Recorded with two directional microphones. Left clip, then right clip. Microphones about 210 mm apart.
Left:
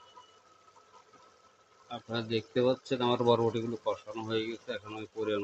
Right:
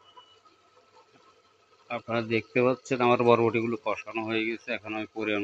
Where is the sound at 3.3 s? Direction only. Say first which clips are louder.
Right 5 dB; 20° right (ahead or behind).